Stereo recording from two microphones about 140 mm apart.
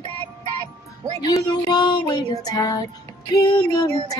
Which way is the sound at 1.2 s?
25° left (ahead or behind).